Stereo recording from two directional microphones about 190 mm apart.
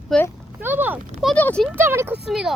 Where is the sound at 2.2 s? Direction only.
5° right (ahead or behind).